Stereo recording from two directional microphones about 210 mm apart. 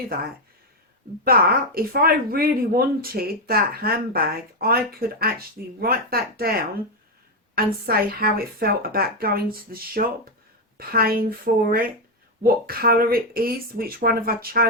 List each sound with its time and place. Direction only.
1.2 s speech: 45° right (ahead or behind)
7.5 s speech: 45° right (ahead or behind)